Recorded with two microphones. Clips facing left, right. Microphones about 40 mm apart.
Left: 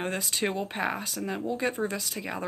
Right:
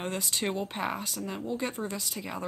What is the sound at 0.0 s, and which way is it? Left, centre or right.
Speech, centre.